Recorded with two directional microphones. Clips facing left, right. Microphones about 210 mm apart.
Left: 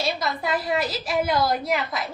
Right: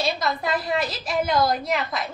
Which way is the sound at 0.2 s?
5° left (ahead or behind).